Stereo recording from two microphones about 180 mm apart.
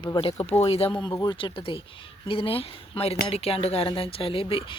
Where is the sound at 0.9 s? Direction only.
25° left (ahead or behind).